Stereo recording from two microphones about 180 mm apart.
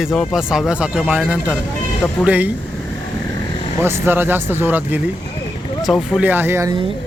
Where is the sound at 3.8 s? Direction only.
10° right (ahead or behind).